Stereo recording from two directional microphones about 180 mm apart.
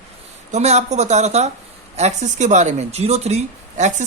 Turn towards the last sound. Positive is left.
turn(degrees=-40)  # may be behind; listen again after turning